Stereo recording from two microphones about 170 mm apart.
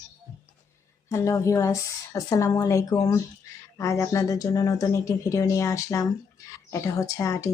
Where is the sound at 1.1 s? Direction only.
15° left (ahead or behind).